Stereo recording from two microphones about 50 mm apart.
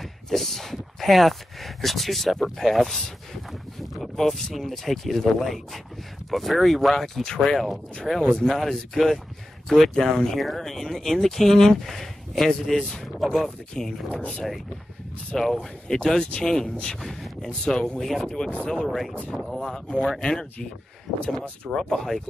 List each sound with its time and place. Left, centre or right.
0.0 s speech: centre
4.0 s speech: centre
8.3 s speech: centre
8.5 s speech: centre
14.1 s speech: left
15.3 s speech: centre
17.0 s speech: centre
19.6 s speech: centre
21.7 s speech: centre